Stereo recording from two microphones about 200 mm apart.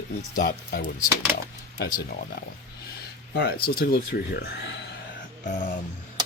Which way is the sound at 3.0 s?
50° left (ahead or behind).